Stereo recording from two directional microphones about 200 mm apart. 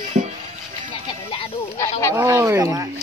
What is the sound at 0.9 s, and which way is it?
Speech, 25° left (ahead or behind).